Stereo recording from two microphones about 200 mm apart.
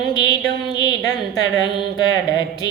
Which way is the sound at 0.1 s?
20° left (ahead or behind).